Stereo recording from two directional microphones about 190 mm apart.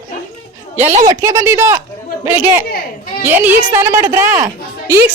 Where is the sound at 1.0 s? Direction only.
20° right (ahead or behind).